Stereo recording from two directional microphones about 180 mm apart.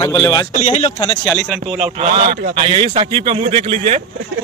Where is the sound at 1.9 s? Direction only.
40° right (ahead or behind).